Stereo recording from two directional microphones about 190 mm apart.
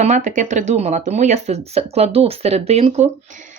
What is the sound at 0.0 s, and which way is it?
Speech, 40° right (ahead or behind).